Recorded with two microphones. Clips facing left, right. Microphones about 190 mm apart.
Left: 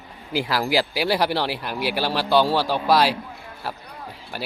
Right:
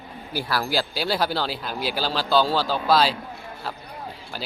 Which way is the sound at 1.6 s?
70° left (ahead or behind).